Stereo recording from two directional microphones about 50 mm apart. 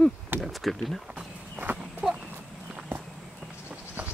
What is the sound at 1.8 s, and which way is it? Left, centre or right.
Horse, centre.